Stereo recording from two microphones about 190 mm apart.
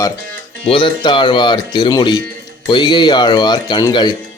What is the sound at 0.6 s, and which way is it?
Speech, 30° left (ahead or behind).